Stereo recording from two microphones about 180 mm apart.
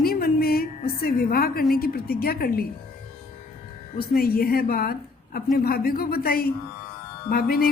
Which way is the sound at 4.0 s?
55° left (ahead or behind).